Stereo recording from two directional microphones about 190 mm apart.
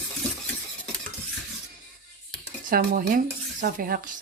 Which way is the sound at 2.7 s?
45° right (ahead or behind).